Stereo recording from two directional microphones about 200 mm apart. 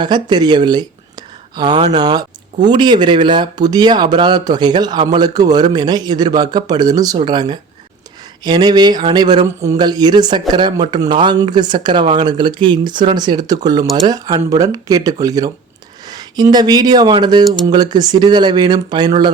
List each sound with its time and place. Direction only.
0.0 s speech: 20° right (ahead or behind)